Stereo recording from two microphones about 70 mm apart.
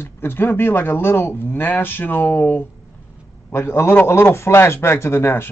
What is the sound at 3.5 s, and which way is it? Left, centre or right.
Speech, left.